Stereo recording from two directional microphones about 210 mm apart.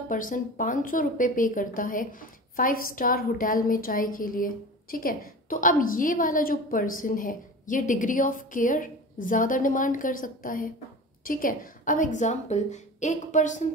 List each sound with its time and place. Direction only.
0.1 s a woman's voice: 40° left (ahead or behind)